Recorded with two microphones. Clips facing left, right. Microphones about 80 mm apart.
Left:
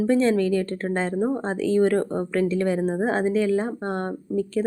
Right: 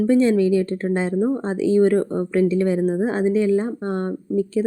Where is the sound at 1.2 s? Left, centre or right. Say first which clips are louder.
Right 3 dB; centre.